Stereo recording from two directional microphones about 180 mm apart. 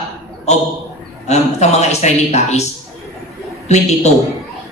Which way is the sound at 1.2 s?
40° left (ahead or behind).